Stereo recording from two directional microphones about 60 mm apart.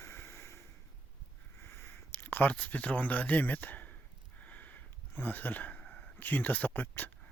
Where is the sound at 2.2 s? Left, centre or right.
Left.